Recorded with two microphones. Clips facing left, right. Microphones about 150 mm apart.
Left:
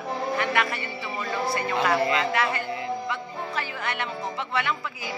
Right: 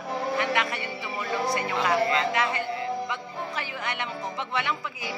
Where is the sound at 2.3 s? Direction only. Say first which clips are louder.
Left 1 dB; 20° right (ahead or behind).